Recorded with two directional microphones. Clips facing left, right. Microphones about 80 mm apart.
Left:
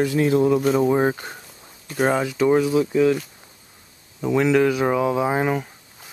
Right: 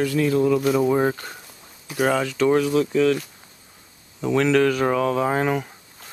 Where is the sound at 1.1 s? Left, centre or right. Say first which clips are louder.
Left 1 dB; centre.